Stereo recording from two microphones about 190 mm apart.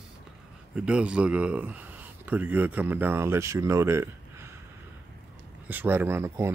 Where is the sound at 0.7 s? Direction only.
5° right (ahead or behind).